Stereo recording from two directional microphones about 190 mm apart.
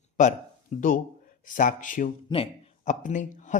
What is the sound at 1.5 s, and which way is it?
Speech, 45° left (ahead or behind).